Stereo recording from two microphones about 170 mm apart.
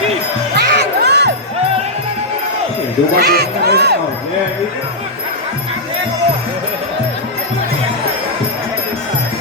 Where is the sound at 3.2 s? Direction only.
75° right (ahead or behind).